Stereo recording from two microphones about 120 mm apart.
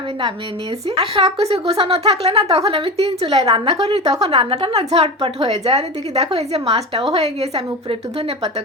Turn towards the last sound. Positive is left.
turn(degrees=-60)  # may be behind; listen again after turning